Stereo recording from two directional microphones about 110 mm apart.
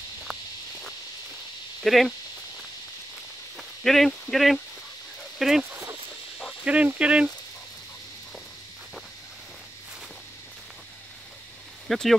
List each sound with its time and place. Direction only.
1.8 s speech: centre (ahead or behind)
3.5 s speech: 5° left (ahead or behind)
5.7 s cricket: 15° right (ahead or behind)
6.6 s speech: 10° right (ahead or behind)
11.9 s speech: centre (ahead or behind)